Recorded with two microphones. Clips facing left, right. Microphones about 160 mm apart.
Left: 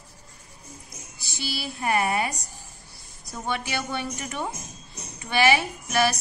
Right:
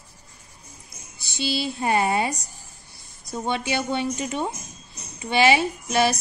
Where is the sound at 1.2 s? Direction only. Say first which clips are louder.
Right 7 dB; 25° right (ahead or behind).